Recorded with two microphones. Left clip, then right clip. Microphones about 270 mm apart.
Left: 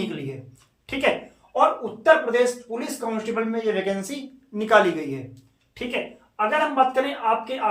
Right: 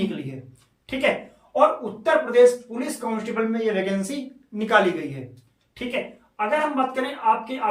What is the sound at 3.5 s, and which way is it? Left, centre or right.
Speech, left.